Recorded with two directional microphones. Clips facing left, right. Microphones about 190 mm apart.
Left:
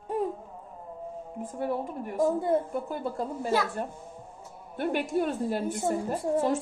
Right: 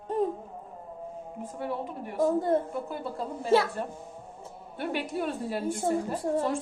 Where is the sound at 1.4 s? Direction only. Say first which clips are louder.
Left 3 dB; 45° left (ahead or behind).